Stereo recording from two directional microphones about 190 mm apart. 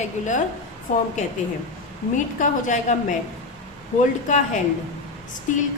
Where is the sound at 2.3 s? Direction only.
40° left (ahead or behind).